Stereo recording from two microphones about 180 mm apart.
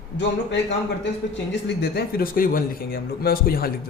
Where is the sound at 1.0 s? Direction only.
85° left.